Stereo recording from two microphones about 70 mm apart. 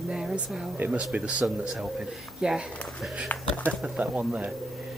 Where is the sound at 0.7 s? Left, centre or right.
Right.